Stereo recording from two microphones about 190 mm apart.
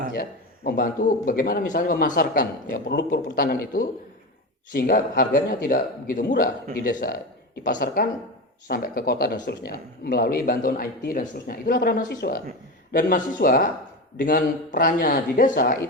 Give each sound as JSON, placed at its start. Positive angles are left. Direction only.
{"t": 0.1, "sound": "speech", "side_deg": 55}